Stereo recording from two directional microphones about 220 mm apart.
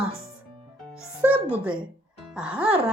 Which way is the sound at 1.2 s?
5° right (ahead or behind).